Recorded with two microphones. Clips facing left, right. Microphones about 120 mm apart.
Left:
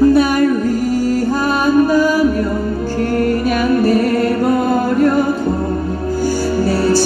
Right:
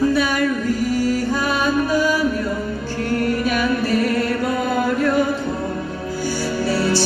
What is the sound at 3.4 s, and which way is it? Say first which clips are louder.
Music: left 6 dB; 45° left (ahead or behind).